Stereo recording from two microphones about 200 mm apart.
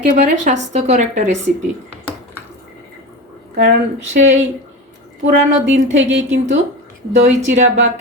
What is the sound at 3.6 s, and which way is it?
Speech, 70° right (ahead or behind).